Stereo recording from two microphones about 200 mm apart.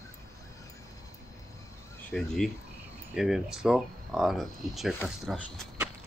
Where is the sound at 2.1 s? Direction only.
Centre (ahead or behind).